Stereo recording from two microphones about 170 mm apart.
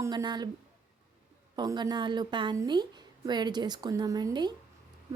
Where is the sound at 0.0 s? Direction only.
25° right (ahead or behind).